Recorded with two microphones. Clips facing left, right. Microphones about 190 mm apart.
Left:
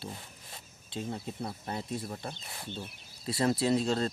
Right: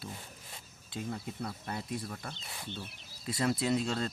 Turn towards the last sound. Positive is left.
turn(degrees=35)  # may be behind; listen again after turning